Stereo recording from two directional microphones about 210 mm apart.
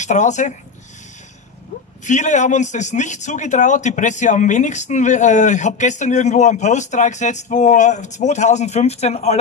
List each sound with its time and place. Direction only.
0.0 s a man's voice: 35° left (ahead or behind)
2.0 s a man's voice: 35° left (ahead or behind)